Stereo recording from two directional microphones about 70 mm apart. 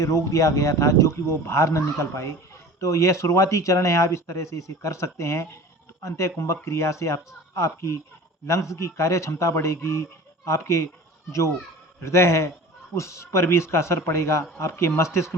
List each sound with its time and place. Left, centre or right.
0.0 s speech: left